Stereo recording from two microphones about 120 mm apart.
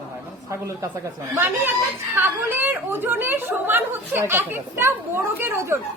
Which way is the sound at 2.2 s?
15° right (ahead or behind).